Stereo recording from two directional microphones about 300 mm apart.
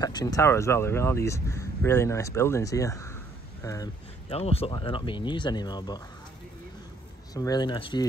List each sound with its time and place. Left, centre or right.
0.0 s speech: centre
7.3 s speech: centre